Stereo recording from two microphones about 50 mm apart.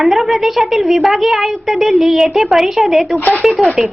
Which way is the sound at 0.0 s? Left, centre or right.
Centre.